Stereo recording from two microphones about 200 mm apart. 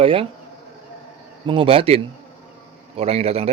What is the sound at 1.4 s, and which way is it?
Speech, 25° right (ahead or behind).